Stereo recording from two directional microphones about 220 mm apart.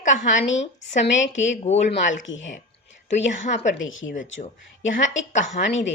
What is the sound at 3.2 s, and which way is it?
Speech, 35° left (ahead or behind).